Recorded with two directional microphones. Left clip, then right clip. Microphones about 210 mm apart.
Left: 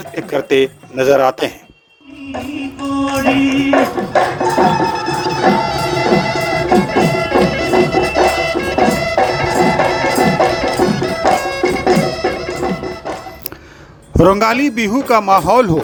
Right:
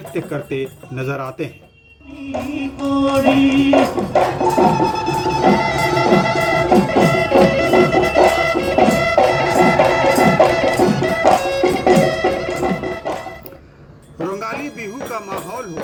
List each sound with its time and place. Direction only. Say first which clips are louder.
0.4 s speech: left 11 dB; 50° left (ahead or behind)
2.8 s music: right 1 dB; 10° left (ahead or behind)
14.3 s speech: left 12 dB; 55° left (ahead or behind)